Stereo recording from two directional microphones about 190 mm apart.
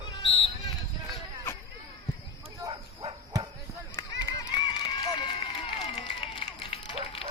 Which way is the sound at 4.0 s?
20° left (ahead or behind).